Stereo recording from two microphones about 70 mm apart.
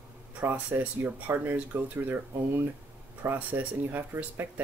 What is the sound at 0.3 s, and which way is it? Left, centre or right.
Speech, right.